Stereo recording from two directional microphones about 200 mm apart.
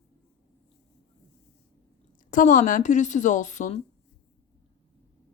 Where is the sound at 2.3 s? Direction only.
40° left (ahead or behind).